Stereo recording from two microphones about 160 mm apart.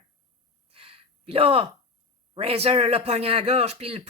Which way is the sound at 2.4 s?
40° right (ahead or behind).